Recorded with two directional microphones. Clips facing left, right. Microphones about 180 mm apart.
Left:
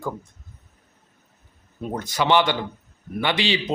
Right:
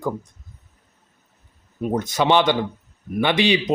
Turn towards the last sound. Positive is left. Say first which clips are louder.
# right 5 dB
turn(degrees=-20)  # may be behind; listen again after turning